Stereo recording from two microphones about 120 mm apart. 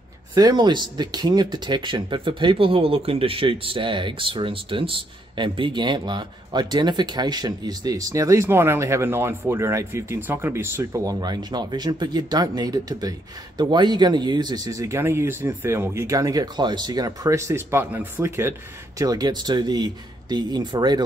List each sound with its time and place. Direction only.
0.3 s speech: 35° right (ahead or behind)
11.1 s speech: 35° right (ahead or behind); by 18.5 s 20° right (ahead or behind)
18.9 s speech: 30° right (ahead or behind)